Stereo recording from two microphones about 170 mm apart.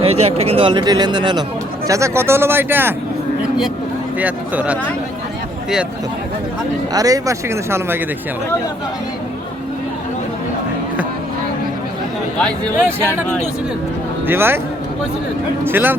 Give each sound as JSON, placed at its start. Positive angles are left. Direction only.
{"t": 0.0, "sound": "speech", "side_deg": -35}
{"t": 4.2, "sound": "speech", "side_deg": -10}
{"t": 6.9, "sound": "speech", "side_deg": -20}
{"t": 14.3, "sound": "speech", "side_deg": -15}
{"t": 15.6, "sound": "speech", "side_deg": -10}